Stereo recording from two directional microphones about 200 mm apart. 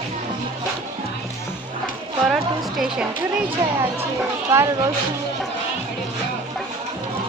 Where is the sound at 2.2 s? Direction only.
Centre (ahead or behind).